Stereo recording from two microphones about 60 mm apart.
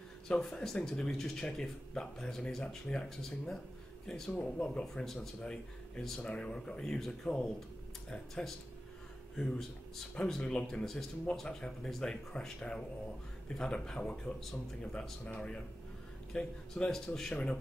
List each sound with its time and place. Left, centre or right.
0.4 s speech: centre
5.4 s speech: centre
10.1 s speech: centre